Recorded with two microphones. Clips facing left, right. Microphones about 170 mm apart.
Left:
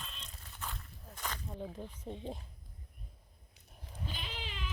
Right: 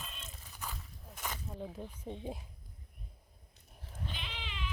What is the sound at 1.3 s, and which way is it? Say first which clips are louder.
Speech: even; 5° right (ahead or behind).